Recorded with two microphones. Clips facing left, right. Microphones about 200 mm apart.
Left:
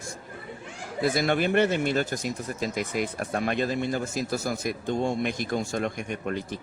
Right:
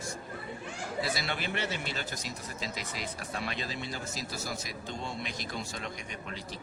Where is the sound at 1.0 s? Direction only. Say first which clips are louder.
Left 16 dB; 50° left (ahead or behind).